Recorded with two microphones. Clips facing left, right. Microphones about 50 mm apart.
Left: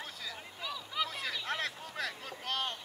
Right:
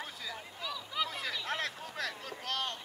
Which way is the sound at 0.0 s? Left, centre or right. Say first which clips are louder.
Right 1 dB; centre.